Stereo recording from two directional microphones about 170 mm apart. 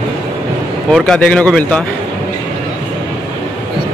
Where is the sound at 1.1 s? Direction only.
5° left (ahead or behind).